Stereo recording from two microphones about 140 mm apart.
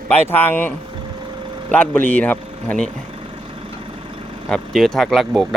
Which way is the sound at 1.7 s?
10° left (ahead or behind).